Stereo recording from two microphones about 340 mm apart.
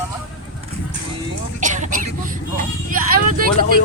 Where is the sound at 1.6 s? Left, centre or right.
Right.